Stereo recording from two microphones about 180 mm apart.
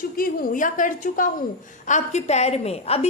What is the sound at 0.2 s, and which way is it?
A woman's voice, 50° left (ahead or behind).